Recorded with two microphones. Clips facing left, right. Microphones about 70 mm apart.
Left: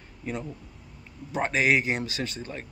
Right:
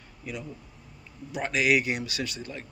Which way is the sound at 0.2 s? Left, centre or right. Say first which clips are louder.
Left 4 dB; left.